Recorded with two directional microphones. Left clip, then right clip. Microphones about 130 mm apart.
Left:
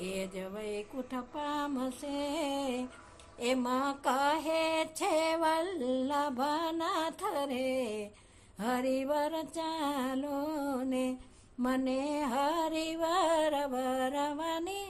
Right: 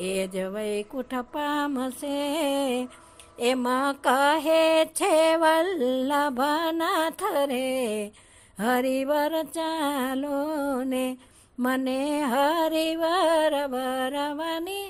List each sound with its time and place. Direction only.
0.0 s music: 50° right (ahead or behind); by 14.8 s 35° right (ahead or behind)